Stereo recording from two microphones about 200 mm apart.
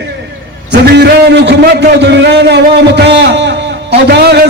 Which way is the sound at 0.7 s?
55° right (ahead or behind).